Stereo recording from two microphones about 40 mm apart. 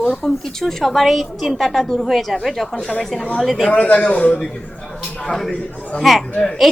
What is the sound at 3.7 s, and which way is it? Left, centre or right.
Speech, left.